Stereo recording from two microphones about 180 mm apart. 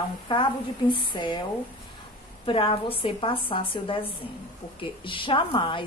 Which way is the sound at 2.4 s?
30° left (ahead or behind).